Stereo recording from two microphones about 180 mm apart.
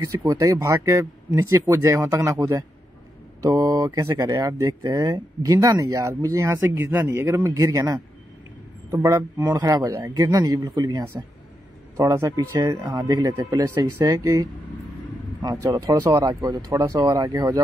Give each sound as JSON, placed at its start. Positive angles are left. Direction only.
{"t": 0.3, "sound": "speech", "side_deg": -15}